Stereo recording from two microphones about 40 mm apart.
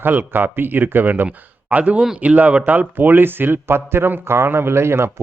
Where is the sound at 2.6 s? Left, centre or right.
Right.